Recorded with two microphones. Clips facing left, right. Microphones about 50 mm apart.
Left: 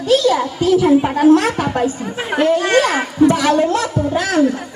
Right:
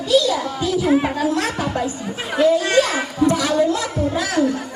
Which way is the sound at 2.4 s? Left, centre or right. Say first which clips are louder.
Left 1 dB; left.